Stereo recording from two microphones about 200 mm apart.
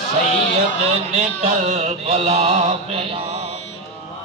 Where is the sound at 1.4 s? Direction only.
35° right (ahead or behind).